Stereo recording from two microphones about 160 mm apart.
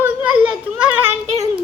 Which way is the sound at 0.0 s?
10° right (ahead or behind).